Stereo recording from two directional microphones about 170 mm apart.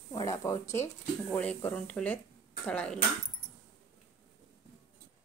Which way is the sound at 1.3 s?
10° left (ahead or behind).